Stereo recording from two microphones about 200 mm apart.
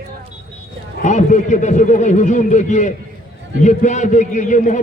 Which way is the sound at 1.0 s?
35° left (ahead or behind).